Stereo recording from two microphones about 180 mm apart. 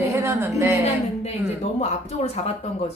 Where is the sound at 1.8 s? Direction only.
35° left (ahead or behind).